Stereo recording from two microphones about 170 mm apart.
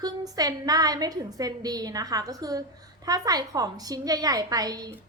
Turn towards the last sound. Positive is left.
turn(degrees=-20)  # may be behind; listen again after turning